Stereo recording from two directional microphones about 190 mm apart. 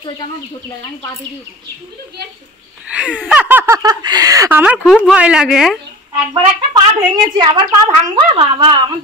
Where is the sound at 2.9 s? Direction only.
5° right (ahead or behind).